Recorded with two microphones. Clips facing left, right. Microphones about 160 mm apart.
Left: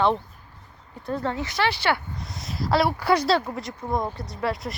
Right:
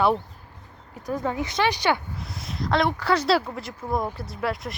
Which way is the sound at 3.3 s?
Centre (ahead or behind).